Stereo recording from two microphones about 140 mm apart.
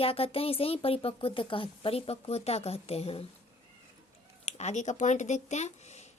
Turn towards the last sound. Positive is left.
turn(degrees=55)  # may be behind; listen again after turning